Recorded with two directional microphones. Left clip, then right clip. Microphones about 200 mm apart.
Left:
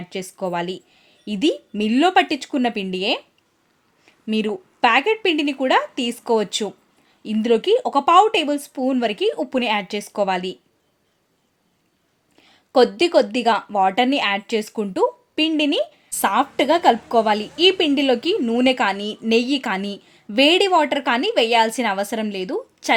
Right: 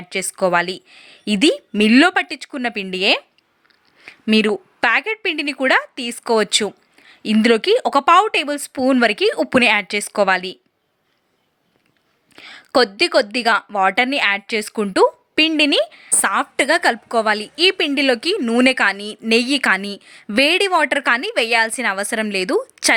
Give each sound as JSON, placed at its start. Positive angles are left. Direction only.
{"t": 0.1, "sound": "a woman's voice", "side_deg": -15}
{"t": 4.0, "sound": "a sound", "side_deg": -10}
{"t": 4.8, "sound": "a woman's voice", "side_deg": -10}
{"t": 12.4, "sound": "a woman's voice", "side_deg": -10}